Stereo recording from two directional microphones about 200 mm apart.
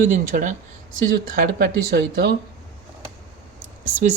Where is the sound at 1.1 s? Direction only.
50° right (ahead or behind).